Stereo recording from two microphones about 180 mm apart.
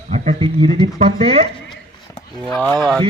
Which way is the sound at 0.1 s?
35° right (ahead or behind).